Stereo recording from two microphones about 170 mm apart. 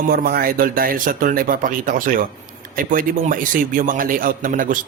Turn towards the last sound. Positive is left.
turn(degrees=-55)  # may be behind; listen again after turning